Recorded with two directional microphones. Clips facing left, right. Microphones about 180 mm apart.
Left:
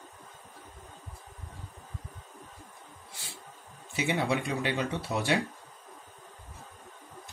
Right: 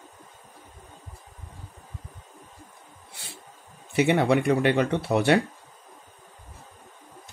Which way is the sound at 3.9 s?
65° right (ahead or behind).